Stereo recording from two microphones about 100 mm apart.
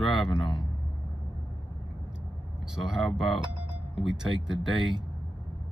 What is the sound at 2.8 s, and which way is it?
Speech, 5° right (ahead or behind).